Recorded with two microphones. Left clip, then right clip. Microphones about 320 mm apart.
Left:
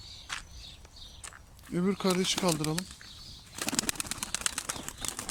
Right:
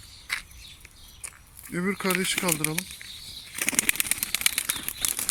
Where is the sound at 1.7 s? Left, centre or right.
Centre.